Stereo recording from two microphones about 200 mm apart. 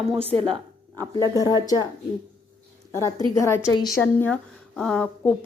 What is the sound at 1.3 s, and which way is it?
Speech, 20° left (ahead or behind).